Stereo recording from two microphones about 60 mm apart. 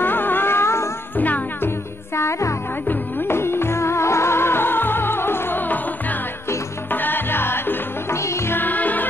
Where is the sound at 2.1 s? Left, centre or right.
Left.